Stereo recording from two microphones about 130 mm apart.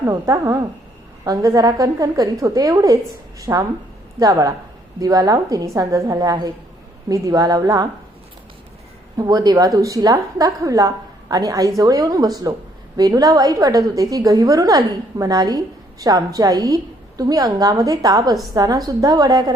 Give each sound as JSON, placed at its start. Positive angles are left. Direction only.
{"t": 0.0, "sound": "a woman's voice", "side_deg": -25}
{"t": 9.1, "sound": "a woman's voice", "side_deg": -30}